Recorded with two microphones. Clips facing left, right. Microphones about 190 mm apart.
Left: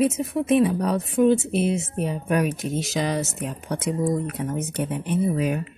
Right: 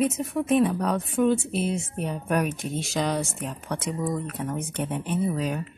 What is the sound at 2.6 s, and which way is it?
Speech, 45° left (ahead or behind).